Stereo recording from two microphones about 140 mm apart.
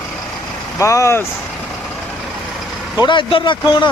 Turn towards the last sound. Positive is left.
turn(degrees=35)  # may be behind; listen again after turning